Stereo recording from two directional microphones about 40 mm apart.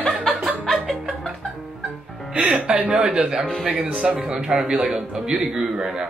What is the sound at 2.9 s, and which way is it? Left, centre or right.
Speech, right.